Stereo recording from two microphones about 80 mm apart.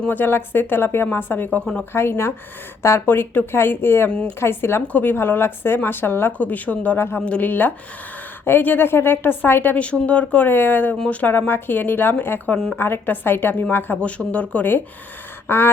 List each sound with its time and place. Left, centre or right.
0.0 s speech: left
7.2 s speech: centre
10.9 s speech: centre
15.4 s quack: left